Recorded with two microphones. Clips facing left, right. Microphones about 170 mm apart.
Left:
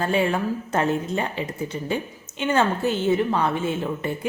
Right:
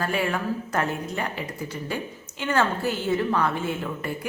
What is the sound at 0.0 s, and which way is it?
A woman's voice, 25° left (ahead or behind).